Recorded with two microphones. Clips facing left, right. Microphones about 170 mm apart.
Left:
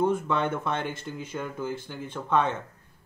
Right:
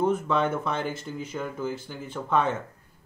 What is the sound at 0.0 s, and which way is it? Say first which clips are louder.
Speech: right 1 dB; 5° right (ahead or behind).